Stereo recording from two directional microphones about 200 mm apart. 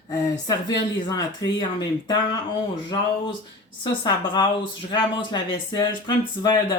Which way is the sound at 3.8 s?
25° left (ahead or behind).